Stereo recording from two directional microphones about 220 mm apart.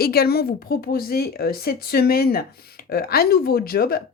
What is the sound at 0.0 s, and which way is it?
Speech, 45° left (ahead or behind).